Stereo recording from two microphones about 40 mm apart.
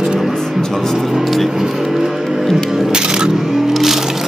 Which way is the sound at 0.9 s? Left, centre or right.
Centre.